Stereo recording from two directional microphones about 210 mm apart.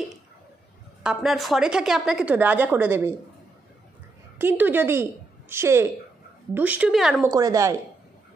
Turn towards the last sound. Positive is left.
turn(degrees=-15)  # may be behind; listen again after turning